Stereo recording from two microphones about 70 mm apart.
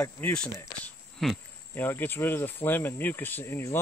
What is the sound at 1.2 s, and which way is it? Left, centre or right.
Speech, centre.